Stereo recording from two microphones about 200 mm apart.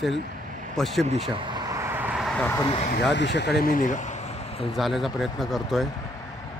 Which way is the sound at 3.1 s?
60° left (ahead or behind).